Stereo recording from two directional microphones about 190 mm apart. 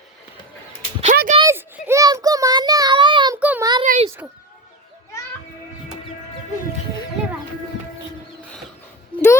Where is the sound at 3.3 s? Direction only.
10° right (ahead or behind).